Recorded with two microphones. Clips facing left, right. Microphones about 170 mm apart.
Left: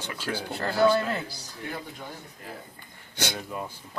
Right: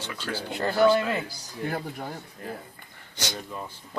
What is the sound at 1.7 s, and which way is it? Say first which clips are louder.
Speech: right 5 dB; 55° right (ahead or behind).